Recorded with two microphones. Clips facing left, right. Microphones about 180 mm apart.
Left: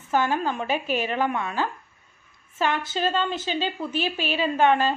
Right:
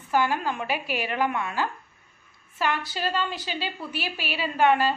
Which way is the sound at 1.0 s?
25° left (ahead or behind).